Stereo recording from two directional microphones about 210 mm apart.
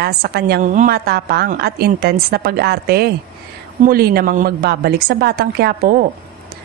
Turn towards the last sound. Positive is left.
turn(degrees=-45)  # may be behind; listen again after turning